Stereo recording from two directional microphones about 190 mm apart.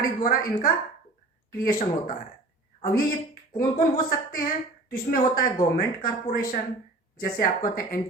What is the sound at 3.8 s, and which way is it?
Speech, 50° left (ahead or behind).